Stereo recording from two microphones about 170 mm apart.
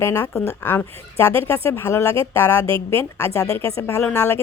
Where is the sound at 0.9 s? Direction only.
35° right (ahead or behind).